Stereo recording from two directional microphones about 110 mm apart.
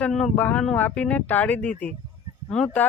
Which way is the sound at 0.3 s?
15° left (ahead or behind).